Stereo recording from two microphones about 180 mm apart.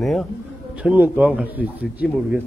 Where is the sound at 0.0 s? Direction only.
Centre (ahead or behind).